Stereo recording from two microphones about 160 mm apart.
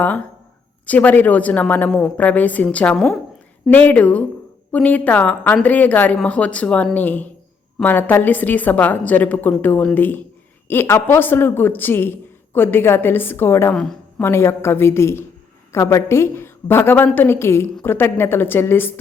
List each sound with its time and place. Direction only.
0.9 s a woman's voice: 10° left (ahead or behind)
13.7 s a woman's voice: 5° left (ahead or behind)
14.3 s a woman's voice: 15° left (ahead or behind)